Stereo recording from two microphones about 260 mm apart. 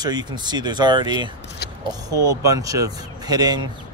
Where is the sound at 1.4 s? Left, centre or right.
Left.